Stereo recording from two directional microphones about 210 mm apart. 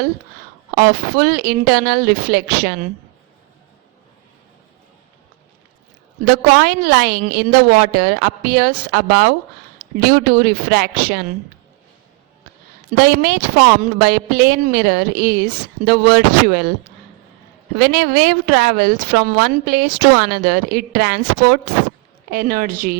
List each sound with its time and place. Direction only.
0.8 s a woman's voice: 45° right (ahead or behind)
6.2 s a woman's voice: 45° right (ahead or behind)
13.0 s a woman's voice: 50° right (ahead or behind)
17.7 s a woman's voice: 50° right (ahead or behind)